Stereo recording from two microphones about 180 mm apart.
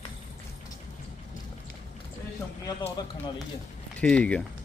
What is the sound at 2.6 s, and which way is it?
Speech, 20° left (ahead or behind).